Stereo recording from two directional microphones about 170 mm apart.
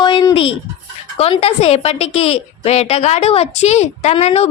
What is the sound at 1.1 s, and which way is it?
A woman's voice, 35° left (ahead or behind).